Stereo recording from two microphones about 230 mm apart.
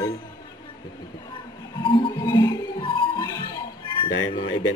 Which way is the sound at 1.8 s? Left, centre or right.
Left.